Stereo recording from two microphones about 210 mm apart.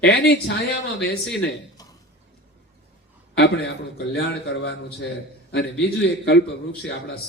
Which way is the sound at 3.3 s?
50° left (ahead or behind).